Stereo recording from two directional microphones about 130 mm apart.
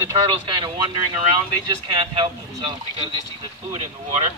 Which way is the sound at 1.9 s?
40° right (ahead or behind).